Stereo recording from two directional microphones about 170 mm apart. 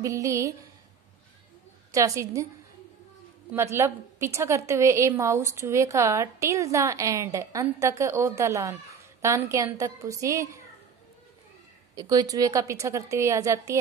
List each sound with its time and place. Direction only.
0.0 s a woman's voice: 20° right (ahead or behind)
1.9 s a woman's voice: 20° right (ahead or behind)
3.5 s a woman's voice: 15° right (ahead or behind)
11.9 s a woman's voice: 20° right (ahead or behind)